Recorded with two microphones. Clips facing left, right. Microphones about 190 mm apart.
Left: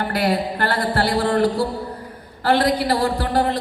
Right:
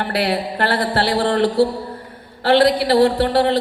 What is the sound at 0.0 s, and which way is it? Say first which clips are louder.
Speech: even; 70° right (ahead or behind).